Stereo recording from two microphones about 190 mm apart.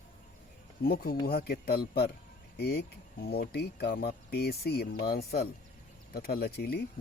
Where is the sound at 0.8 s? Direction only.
50° left (ahead or behind).